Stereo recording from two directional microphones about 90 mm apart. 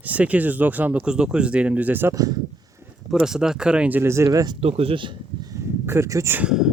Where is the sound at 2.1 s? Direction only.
40° right (ahead or behind).